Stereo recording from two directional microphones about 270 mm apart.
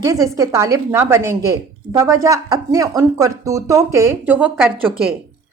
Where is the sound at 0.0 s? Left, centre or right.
Centre.